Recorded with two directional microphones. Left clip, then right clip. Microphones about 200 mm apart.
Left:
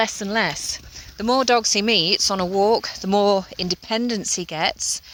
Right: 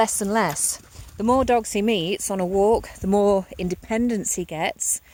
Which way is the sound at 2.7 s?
30° right (ahead or behind).